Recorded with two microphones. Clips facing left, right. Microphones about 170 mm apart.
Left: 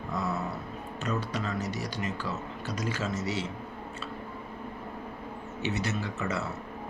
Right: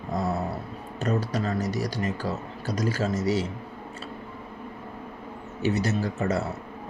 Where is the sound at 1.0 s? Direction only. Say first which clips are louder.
Right 6 dB; 40° right (ahead or behind).